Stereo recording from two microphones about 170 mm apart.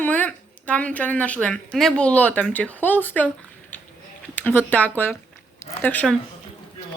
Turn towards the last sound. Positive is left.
turn(degrees=5)  # may be behind; listen again after turning